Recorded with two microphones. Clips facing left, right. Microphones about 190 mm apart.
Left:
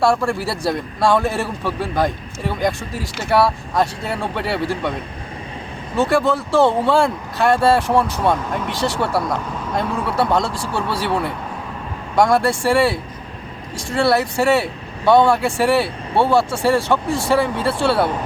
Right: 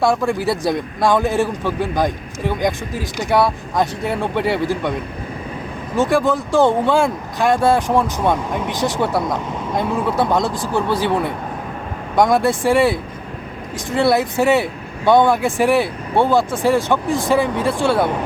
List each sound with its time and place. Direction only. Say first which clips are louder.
0.0 s speech: right 1 dB; 15° right (ahead or behind)
6.0 s speech: right 1 dB; 15° right (ahead or behind)